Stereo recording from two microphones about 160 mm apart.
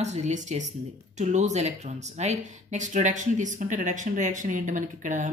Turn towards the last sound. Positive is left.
turn(degrees=-50)  # may be behind; listen again after turning